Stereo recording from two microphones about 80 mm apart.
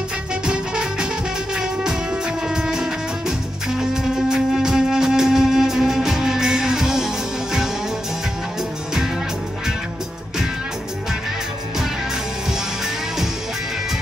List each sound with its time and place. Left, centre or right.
0.5 s music: centre